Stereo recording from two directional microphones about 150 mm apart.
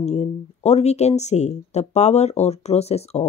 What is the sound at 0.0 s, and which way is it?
A woman's voice, 45° left (ahead or behind).